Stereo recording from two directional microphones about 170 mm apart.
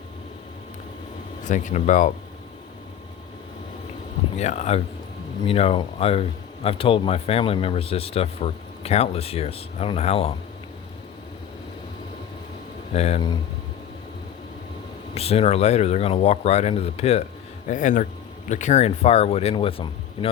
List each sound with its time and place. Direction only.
1.5 s speech: 45° left (ahead or behind)
4.4 s speech: 40° left (ahead or behind)
12.9 s speech: 40° left (ahead or behind)
15.1 s speech: 35° left (ahead or behind)
17.7 s speech: 50° left (ahead or behind); by 19.9 s 30° left (ahead or behind)